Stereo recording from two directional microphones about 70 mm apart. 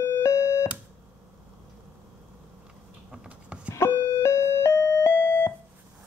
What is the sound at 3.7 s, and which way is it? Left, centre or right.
Doorbell, left.